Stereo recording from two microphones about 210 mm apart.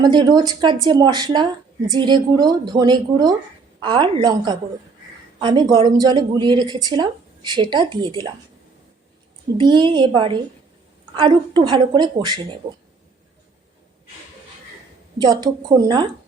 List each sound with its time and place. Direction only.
0.0 s a woman's voice: 20° right (ahead or behind)
9.6 s a woman's voice: 20° right (ahead or behind)
15.2 s a woman's voice: 20° right (ahead or behind)